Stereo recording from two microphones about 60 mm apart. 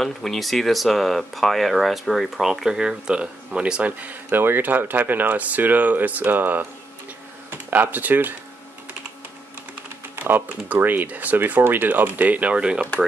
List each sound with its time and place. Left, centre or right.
0.0 s speech: centre; by 8.4 s right
10.1 s speech: right; by 12.8 s centre